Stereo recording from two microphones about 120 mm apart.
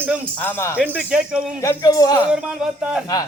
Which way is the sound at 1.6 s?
30° left (ahead or behind).